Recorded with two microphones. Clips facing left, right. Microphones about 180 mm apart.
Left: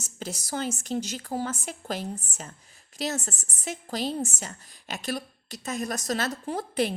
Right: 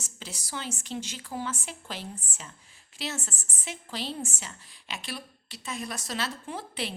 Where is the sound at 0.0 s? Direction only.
45° left (ahead or behind).